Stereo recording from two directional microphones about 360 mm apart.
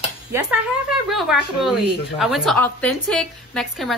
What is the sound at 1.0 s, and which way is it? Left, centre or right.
A woman's voice, centre.